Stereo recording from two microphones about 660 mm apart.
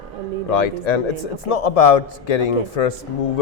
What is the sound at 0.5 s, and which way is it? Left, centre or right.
Speech, left.